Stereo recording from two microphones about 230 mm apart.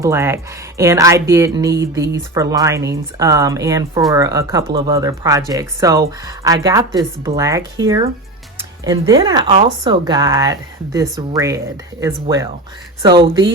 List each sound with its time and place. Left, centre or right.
0.0 s speech: centre
8.5 s music: centre
9.1 s speech: centre